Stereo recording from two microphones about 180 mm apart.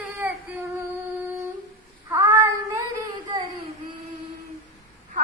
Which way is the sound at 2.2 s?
15° right (ahead or behind).